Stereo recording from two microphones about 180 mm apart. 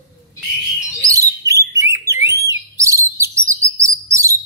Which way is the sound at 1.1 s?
20° right (ahead or behind).